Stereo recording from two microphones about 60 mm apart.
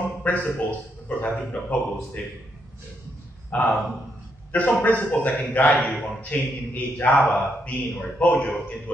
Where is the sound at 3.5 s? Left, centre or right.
Left.